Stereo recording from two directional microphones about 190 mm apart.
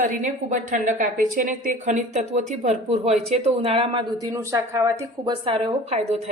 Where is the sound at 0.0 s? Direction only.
40° right (ahead or behind).